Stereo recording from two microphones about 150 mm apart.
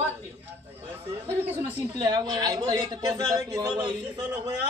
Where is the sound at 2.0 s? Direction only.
30° right (ahead or behind).